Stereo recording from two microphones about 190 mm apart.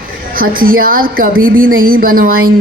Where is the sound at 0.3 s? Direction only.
50° right (ahead or behind).